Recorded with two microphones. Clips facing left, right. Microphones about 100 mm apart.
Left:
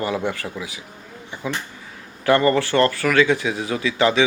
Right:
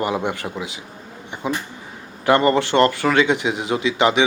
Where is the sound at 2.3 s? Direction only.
20° right (ahead or behind).